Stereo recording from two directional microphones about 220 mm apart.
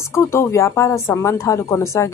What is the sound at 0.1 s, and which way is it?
Speech, 10° left (ahead or behind).